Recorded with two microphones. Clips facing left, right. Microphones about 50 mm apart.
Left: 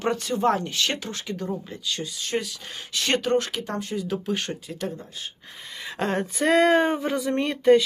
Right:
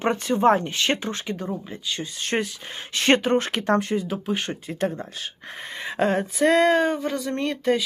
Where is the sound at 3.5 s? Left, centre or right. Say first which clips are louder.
Right 8 dB; right.